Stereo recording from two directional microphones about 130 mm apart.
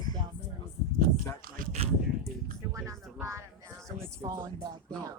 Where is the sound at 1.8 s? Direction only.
50° right (ahead or behind).